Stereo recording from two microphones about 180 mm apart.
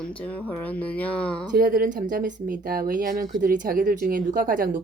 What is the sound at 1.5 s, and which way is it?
Speech, 50° right (ahead or behind).